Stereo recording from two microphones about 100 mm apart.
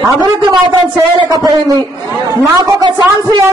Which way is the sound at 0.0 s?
45° right (ahead or behind).